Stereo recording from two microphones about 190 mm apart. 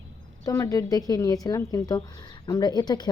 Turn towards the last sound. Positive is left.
turn(degrees=20)  # may be behind; listen again after turning